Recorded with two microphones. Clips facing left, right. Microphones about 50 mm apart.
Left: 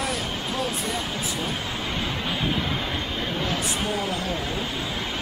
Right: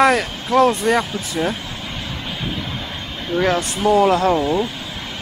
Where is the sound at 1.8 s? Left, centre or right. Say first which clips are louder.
Left 1 dB; centre.